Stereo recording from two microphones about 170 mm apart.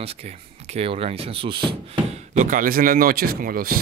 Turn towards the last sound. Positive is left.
turn(degrees=-60)  # may be behind; listen again after turning